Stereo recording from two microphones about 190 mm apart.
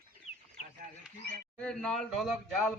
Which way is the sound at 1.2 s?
60° right (ahead or behind).